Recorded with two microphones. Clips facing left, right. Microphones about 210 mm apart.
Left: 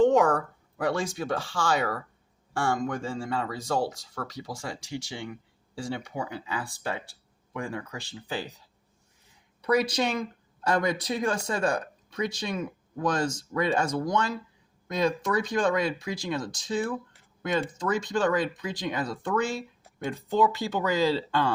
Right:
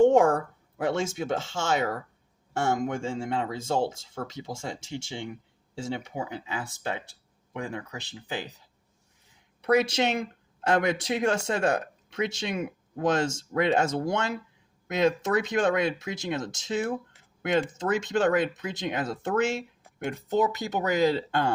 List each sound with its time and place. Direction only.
0.9 s speech: 25° right (ahead or behind)
9.6 s speech: 25° right (ahead or behind)